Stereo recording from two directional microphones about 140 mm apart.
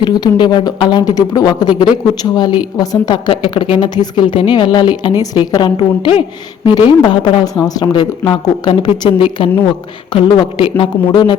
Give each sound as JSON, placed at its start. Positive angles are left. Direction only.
{"t": 0.0, "sound": "a woman's voice", "side_deg": 30}
{"t": 5.7, "sound": "a woman's voice", "side_deg": 40}